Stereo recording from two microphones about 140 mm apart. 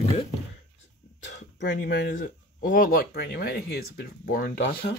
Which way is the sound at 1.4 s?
70° left (ahead or behind).